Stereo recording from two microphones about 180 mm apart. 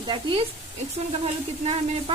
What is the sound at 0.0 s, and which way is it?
Speech, 30° right (ahead or behind).